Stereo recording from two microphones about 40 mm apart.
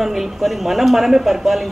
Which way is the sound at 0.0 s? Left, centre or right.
Centre.